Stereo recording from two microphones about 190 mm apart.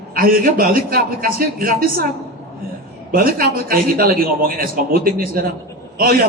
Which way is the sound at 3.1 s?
50° right (ahead or behind).